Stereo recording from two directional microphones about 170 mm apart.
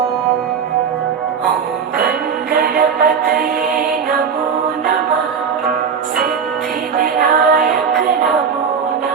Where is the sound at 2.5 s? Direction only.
60° right (ahead or behind).